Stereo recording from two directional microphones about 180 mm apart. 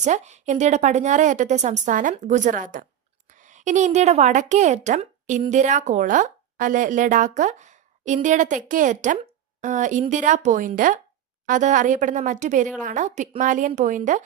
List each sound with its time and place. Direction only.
0.0 s speech: 40° right (ahead or behind)